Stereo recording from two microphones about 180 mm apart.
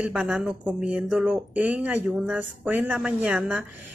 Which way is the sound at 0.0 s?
5° right (ahead or behind).